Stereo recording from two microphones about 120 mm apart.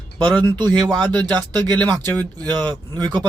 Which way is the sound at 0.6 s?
40° right (ahead or behind).